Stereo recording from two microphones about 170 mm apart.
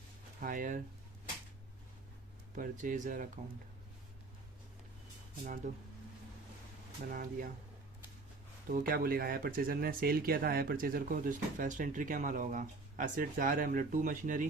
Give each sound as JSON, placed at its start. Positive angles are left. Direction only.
{"t": 0.3, "sound": "speech", "side_deg": -50}
{"t": 2.6, "sound": "speech", "side_deg": -50}
{"t": 5.6, "sound": "speech", "side_deg": -45}
{"t": 7.1, "sound": "speech", "side_deg": -55}
{"t": 8.7, "sound": "speech", "side_deg": -60}